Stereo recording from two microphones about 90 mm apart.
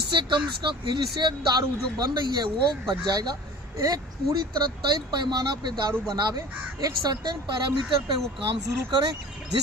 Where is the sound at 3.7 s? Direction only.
40° right (ahead or behind).